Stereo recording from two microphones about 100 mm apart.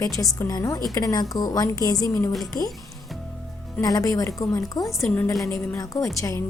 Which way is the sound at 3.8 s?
35° left (ahead or behind).